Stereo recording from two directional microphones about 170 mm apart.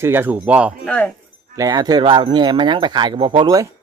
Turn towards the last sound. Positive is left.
turn(degrees=-25)  # may be behind; listen again after turning